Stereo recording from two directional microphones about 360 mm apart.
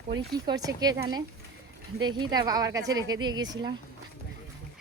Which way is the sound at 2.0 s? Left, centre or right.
Centre.